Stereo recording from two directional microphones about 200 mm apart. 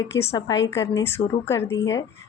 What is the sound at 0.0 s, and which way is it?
A woman's voice, 15° left (ahead or behind).